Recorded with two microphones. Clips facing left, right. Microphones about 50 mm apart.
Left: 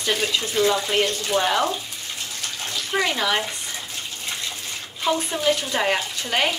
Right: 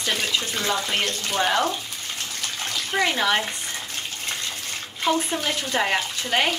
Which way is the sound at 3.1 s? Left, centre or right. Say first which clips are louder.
Right 1 dB; centre.